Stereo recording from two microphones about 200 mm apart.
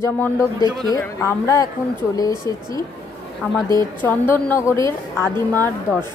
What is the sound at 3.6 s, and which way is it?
A woman's voice, 15° left (ahead or behind).